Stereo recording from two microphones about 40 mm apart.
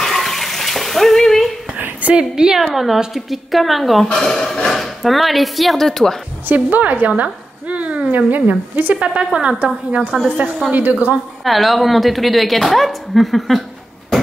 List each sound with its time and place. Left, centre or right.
0.0 s bathtub: centre
1.8 s a sound: right
2.1 s a woman's voice: centre
4.1 s a woman's voice: centre
6.4 s a woman's voice: right
8.3 s speech: right
9.0 s a woman's voice: right
10.7 s speech: right
11.4 s a woman's voice: centre